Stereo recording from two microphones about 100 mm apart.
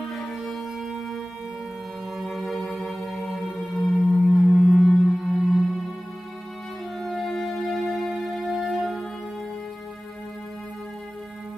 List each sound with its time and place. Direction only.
0.1 s music: centre (ahead or behind)
2.8 s singing bowl: centre (ahead or behind)
7.0 s music: 5° left (ahead or behind)